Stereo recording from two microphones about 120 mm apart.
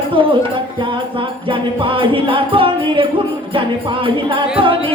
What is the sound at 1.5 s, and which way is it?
Music, 45° right (ahead or behind).